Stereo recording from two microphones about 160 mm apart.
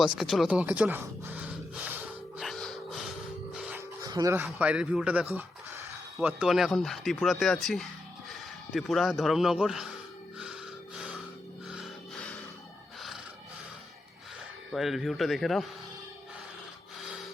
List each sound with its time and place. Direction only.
0.2 s speech: centre (ahead or behind)
2.4 s music: centre (ahead or behind)
4.0 s speech: 20° right (ahead or behind)
4.4 s speech: 5° right (ahead or behind)
5.3 s a sound: 10° right (ahead or behind)
6.1 s speech: 5° right (ahead or behind)
10.9 s music: 5° right (ahead or behind)
14.7 s speech: centre (ahead or behind)